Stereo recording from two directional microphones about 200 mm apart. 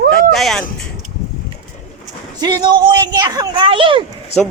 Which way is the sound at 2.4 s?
20° right (ahead or behind).